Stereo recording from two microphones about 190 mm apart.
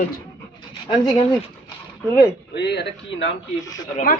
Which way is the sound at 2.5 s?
60° left (ahead or behind).